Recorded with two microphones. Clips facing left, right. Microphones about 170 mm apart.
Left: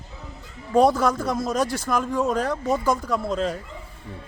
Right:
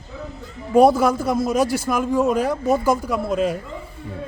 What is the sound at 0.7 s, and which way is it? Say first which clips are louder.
A man's voice: right 4 dB; 10° right (ahead or behind).